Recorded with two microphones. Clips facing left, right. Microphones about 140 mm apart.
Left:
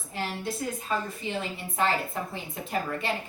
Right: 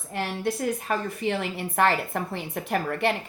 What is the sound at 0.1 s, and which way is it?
A woman's voice, 65° right (ahead or behind).